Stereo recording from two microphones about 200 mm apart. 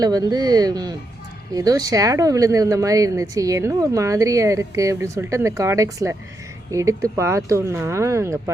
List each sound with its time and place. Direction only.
0.0 s speech: 20° right (ahead or behind)